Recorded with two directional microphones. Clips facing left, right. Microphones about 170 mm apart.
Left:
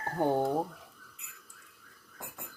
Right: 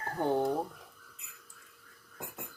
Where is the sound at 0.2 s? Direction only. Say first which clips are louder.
Left 1 dB; 15° left (ahead or behind).